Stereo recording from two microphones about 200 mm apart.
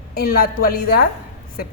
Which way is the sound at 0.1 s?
50° left (ahead or behind).